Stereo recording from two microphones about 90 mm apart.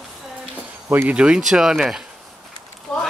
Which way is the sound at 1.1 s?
10° right (ahead or behind).